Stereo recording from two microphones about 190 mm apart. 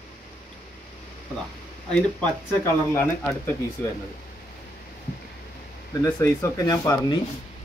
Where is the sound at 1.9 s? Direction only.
5° left (ahead or behind).